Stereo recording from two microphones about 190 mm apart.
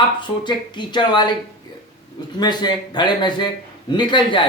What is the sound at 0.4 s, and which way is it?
Speech, 25° left (ahead or behind).